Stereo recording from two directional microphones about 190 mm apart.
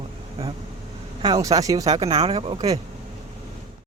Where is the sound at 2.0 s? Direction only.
30° right (ahead or behind).